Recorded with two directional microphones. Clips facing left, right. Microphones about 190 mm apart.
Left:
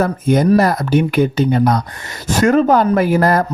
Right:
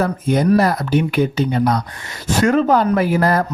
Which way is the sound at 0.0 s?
45° left (ahead or behind).